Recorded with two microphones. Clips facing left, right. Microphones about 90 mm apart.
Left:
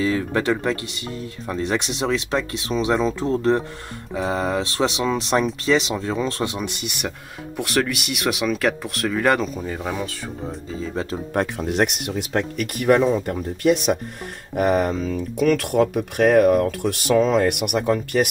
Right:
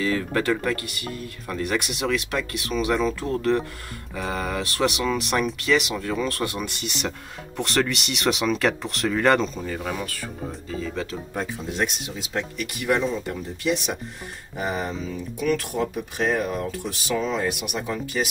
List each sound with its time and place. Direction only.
0.0 s speech: 15° left (ahead or behind)
9.6 s speech: 20° left (ahead or behind)
11.3 s speech: 65° left (ahead or behind)